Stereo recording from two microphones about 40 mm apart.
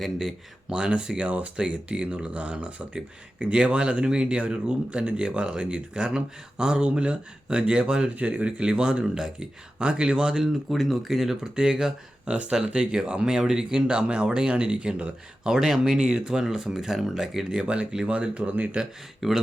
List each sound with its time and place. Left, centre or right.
0.7 s speech: right
8.1 s speech: right
8.4 s speech: right
10.7 s speech: centre
11.5 s speech: right
15.4 s speech: centre
19.2 s speech: centre